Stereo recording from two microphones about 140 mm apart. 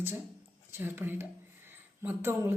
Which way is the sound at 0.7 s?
15° right (ahead or behind).